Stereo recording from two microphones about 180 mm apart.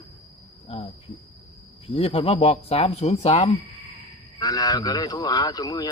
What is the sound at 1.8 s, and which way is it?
Speech, 30° left (ahead or behind).